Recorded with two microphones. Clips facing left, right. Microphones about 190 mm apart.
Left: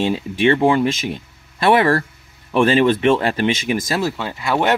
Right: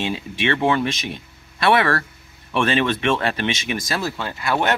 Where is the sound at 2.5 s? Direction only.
35° left (ahead or behind).